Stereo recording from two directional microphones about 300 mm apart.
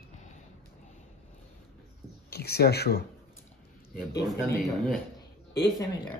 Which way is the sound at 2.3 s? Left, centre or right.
Left.